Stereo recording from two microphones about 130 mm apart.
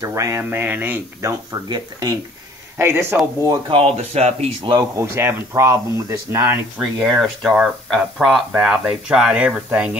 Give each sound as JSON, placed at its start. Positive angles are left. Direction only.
{"t": 0.0, "sound": "speech", "side_deg": -25}
{"t": 1.5, "sound": "speech", "side_deg": -30}
{"t": 2.8, "sound": "speech", "side_deg": -20}
{"t": 3.7, "sound": "speech", "side_deg": -50}
{"t": 4.7, "sound": "speech", "side_deg": -20}
{"t": 6.8, "sound": "speech", "side_deg": 0}